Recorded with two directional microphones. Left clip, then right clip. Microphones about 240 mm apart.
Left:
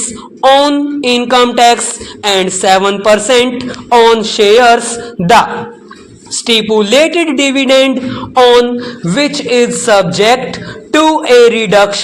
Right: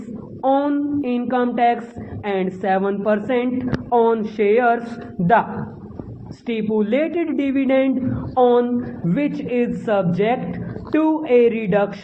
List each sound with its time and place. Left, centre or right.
0.4 s a woman's voice: left
6.4 s a woman's voice: left